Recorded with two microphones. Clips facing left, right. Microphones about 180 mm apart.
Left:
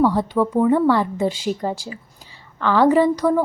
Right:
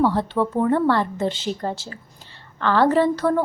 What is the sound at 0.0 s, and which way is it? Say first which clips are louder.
A woman's voice: left 2 dB; 10° left (ahead or behind).